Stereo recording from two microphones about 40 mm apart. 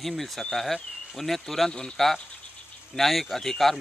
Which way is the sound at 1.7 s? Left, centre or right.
Centre.